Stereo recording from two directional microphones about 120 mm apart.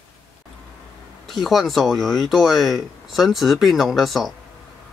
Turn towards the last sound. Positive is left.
turn(degrees=0)  # may be behind; listen again after turning